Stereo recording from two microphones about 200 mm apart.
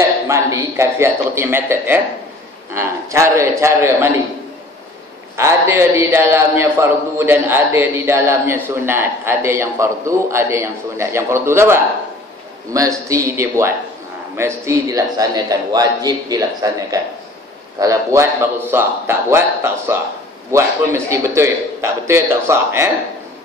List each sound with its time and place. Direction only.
0.3 s a man's voice: 15° right (ahead or behind)
5.3 s a man's voice: 15° right (ahead or behind)